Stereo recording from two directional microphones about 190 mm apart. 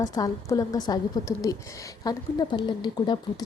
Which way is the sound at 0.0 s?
20° left (ahead or behind).